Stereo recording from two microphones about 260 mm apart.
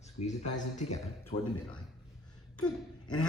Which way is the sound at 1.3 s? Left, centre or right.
Left.